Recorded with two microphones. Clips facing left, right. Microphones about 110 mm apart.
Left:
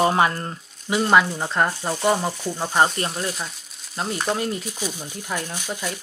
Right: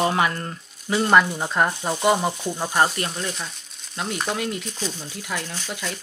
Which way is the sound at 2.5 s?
15° left (ahead or behind).